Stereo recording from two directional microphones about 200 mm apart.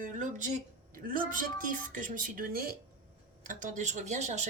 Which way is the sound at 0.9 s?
45° right (ahead or behind).